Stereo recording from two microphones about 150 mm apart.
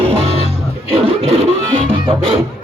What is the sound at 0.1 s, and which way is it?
Music, 40° right (ahead or behind).